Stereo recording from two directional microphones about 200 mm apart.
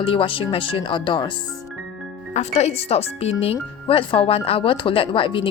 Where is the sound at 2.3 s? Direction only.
35° left (ahead or behind).